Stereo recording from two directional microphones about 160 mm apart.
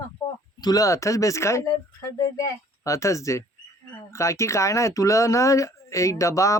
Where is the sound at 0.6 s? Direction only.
25° left (ahead or behind).